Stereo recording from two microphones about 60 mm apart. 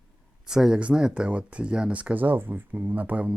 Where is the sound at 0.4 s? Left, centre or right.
Centre.